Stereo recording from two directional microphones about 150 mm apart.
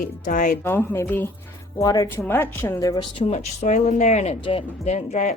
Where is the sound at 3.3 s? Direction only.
55° left (ahead or behind).